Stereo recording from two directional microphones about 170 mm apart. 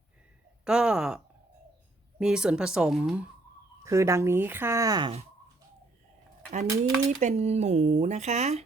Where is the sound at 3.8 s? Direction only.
15° right (ahead or behind).